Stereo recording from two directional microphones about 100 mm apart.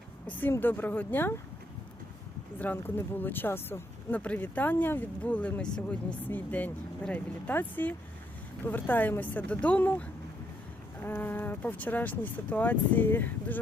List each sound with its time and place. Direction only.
0.3 s a woman's voice: 20° left (ahead or behind)
2.6 s speech: 20° left (ahead or behind)